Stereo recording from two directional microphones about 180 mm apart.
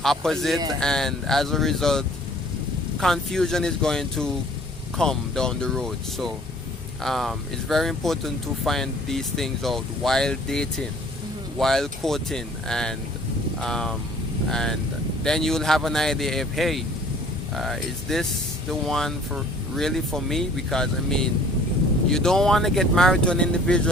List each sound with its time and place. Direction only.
0.0 s speech: centre (ahead or behind)